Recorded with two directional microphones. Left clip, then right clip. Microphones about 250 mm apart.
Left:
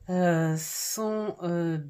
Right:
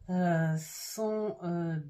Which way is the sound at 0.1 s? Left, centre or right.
Left.